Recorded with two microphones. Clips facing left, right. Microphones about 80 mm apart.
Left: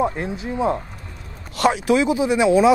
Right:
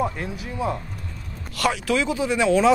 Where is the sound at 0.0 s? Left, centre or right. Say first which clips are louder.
Left 4 dB; left.